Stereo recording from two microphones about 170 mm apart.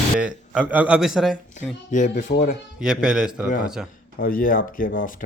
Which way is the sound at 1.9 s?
50° left (ahead or behind).